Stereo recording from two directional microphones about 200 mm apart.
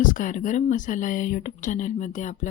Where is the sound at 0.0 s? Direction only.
40° left (ahead or behind).